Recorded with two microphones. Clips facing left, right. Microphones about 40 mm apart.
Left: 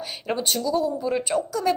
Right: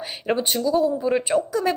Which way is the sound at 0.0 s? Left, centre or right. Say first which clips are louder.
Right 3 dB; right.